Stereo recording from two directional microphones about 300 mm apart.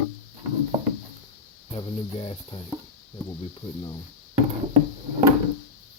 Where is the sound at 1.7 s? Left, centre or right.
Centre.